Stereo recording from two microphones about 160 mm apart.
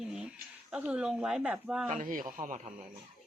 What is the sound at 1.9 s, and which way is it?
Speech, 55° right (ahead or behind).